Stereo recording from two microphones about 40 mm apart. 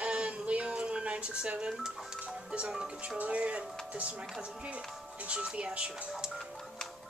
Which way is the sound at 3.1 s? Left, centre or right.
Right.